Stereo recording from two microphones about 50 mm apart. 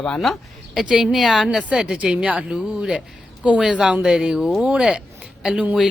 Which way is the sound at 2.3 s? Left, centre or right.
Right.